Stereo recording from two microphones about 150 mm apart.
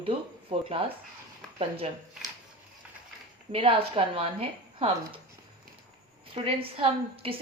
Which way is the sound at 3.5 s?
40° right (ahead or behind).